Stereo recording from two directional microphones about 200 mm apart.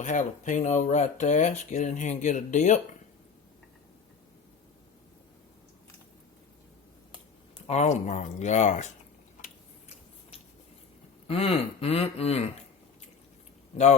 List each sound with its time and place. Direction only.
0.0 s speech: 40° left (ahead or behind)
7.7 s speech: 35° left (ahead or behind)
11.3 s speech: 30° left (ahead or behind)